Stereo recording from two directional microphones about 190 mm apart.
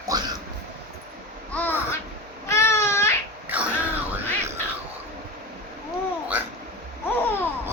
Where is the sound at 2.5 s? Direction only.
15° left (ahead or behind).